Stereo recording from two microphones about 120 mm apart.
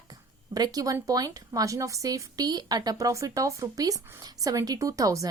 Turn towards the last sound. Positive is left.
turn(degrees=-30)  # may be behind; listen again after turning